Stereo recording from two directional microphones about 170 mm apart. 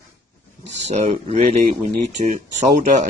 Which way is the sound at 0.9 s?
40° right (ahead or behind).